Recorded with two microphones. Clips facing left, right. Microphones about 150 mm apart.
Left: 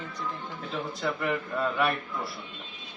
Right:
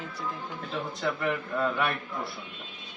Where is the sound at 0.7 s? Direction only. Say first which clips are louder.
Even; centre (ahead or behind).